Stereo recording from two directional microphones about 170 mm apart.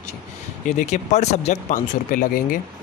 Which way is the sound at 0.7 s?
45° left (ahead or behind).